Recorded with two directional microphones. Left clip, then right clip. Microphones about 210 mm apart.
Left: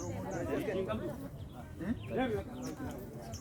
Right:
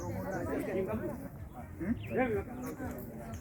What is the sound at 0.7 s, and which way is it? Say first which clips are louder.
Chatter: right 1 dB; 15° left (ahead or behind).